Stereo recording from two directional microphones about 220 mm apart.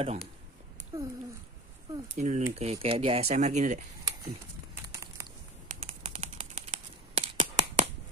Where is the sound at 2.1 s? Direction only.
35° right (ahead or behind).